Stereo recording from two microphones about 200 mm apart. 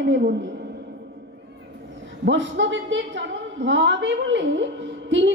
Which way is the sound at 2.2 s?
65° right (ahead or behind).